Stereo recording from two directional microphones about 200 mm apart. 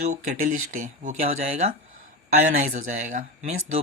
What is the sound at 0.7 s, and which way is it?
Speech, 40° right (ahead or behind).